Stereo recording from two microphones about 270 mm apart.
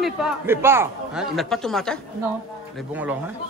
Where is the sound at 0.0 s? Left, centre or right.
Centre.